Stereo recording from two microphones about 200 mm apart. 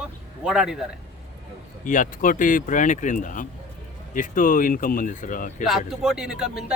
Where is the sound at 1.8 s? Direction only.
40° left (ahead or behind).